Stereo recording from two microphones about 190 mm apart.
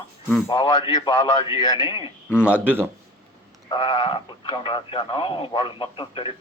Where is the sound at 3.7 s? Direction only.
25° left (ahead or behind).